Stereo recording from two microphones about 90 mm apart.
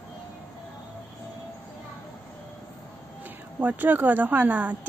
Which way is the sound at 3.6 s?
20° right (ahead or behind).